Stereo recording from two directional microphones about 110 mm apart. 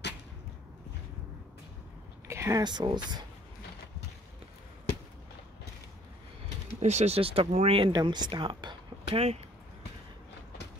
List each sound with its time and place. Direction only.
2.2 s a sound: 25° right (ahead or behind)
2.6 s speech: 40° right (ahead or behind)
6.8 s speech: 90° right; by 7.9 s 65° right (ahead or behind)
7.9 s speech: 40° right (ahead or behind)